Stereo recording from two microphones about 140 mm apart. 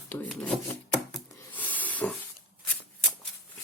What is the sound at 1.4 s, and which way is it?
Hiss, 10° left (ahead or behind).